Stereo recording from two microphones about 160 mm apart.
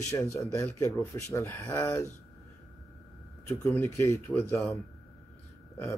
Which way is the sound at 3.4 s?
20° left (ahead or behind).